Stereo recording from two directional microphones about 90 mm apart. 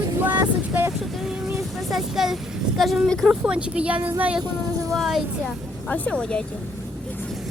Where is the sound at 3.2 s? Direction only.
10° right (ahead or behind).